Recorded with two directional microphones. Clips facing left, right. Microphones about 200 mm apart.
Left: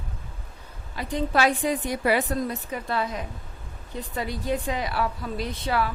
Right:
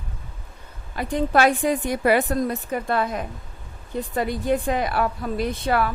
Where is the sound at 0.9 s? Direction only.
55° right (ahead or behind).